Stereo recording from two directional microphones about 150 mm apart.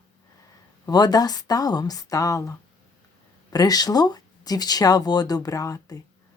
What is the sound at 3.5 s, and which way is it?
Speech, 25° left (ahead or behind).